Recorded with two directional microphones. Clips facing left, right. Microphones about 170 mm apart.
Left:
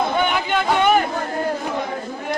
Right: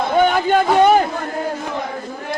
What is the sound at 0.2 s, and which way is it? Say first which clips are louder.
Speech: right 6 dB; 40° right (ahead or behind).